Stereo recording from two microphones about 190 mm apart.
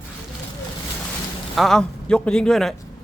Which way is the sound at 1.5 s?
Centre (ahead or behind).